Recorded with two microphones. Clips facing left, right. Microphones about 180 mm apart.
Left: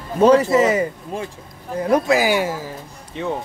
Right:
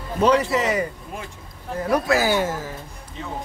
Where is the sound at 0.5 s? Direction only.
25° left (ahead or behind).